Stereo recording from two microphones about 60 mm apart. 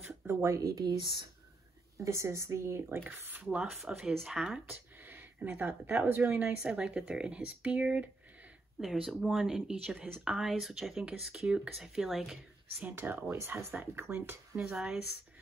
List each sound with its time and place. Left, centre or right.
0.3 s speech: right
2.0 s a woman's voice: right
2.9 s speech: right
3.7 s speech: centre
4.6 s speech: right
6.3 s speech: centre
8.8 s speech: centre
9.9 s speech: right
10.2 s speech: centre
11.3 s speech: centre
12.8 s speech: right
13.3 s a woman's voice: right
14.7 s speech: centre